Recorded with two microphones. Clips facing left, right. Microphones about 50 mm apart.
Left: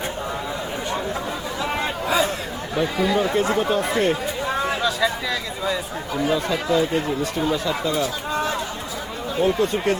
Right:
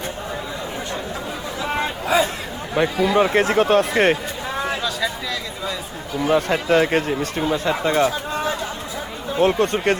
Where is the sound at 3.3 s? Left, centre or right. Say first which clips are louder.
Right 4 dB; right.